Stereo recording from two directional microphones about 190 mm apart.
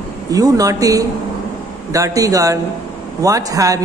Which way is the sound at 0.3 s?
20° right (ahead or behind).